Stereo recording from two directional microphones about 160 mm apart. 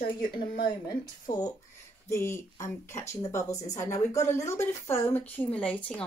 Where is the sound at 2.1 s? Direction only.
15° left (ahead or behind).